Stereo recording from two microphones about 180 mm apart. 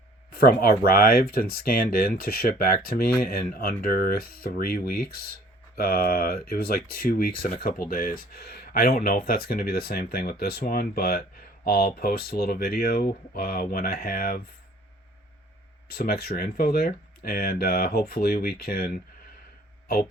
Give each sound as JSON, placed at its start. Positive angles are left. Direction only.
{"t": 0.6, "sound": "speech", "side_deg": 55}
{"t": 15.9, "sound": "speech", "side_deg": 55}